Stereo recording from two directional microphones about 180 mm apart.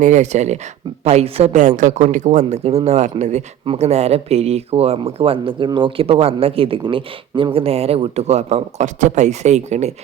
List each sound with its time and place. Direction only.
0.0 s speech: 40° right (ahead or behind)
1.6 s speech: 45° right (ahead or behind)